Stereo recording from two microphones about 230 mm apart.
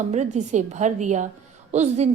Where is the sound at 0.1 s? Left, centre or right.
Right.